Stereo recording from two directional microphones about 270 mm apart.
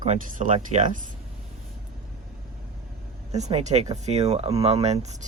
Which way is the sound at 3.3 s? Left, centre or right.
Right.